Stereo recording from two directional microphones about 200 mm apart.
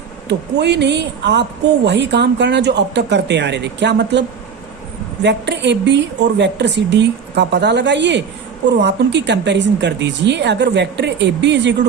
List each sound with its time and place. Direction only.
0.3 s a woman's voice: 60° right (ahead or behind)
5.2 s a woman's voice: 60° right (ahead or behind)